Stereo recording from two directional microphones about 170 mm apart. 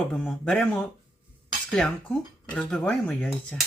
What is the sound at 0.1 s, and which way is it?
Speech, 5° left (ahead or behind).